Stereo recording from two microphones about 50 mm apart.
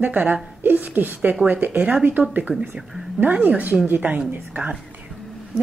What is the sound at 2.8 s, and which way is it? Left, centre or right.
Speech, centre.